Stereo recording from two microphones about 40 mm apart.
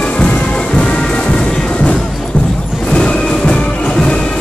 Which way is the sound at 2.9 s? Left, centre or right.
Left.